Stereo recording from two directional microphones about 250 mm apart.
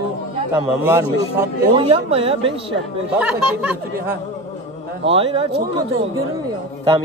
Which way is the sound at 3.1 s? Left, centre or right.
Centre.